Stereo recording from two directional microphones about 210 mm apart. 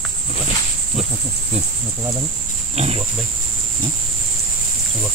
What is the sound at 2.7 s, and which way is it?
Speech, 30° right (ahead or behind).